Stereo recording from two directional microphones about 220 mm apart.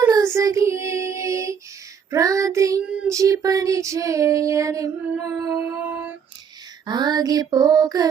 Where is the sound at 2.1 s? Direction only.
15° right (ahead or behind).